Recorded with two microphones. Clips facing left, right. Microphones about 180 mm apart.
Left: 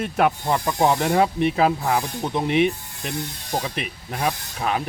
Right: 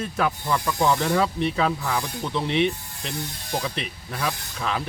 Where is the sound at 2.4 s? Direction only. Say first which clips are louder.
Left 3 dB; 10° left (ahead or behind).